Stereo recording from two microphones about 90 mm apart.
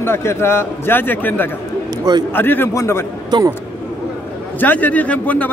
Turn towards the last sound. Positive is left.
turn(degrees=15)  # may be behind; listen again after turning